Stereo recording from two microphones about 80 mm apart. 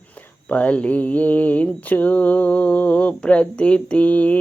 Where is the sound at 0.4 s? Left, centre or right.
Centre.